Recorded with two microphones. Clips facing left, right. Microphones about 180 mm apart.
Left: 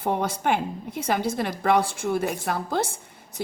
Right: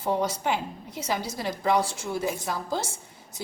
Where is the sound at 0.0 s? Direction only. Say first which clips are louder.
Left 1 dB; 55° left (ahead or behind).